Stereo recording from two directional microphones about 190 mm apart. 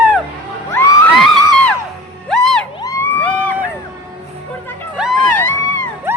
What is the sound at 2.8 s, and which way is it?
Crowd, 10° left (ahead or behind).